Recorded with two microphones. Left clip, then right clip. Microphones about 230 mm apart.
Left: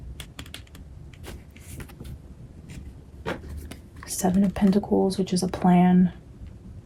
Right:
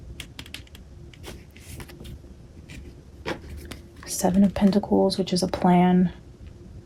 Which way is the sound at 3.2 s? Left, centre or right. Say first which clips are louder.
Even; centre.